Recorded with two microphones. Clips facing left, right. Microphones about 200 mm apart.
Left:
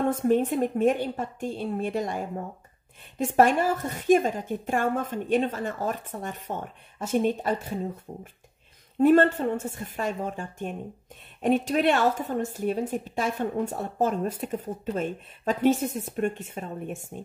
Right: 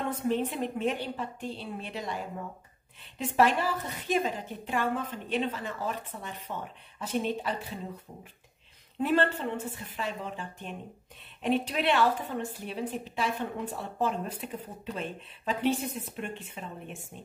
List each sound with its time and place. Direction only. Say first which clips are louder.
0.0 s a woman's voice: left 7 dB; 45° left (ahead or behind)
3.3 s a woman's voice: left 4 dB; 50° left (ahead or behind)
8.1 s a woman's voice: left 7 dB; 35° left (ahead or behind)